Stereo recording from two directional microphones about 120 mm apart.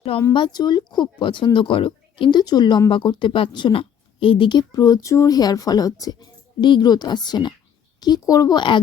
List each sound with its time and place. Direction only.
0.3 s speech: 40° left (ahead or behind)